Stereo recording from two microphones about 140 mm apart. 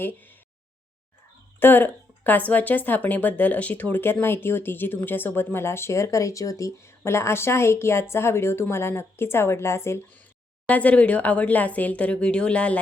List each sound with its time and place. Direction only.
0.0 s a woman's voice: 15° left (ahead or behind)
1.5 s a woman's voice: 15° left (ahead or behind)